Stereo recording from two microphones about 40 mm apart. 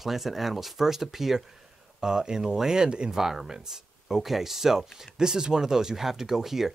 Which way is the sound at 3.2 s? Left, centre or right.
Centre.